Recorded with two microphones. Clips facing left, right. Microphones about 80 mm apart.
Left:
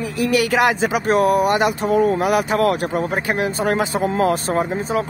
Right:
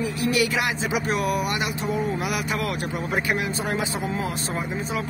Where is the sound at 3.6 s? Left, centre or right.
Left.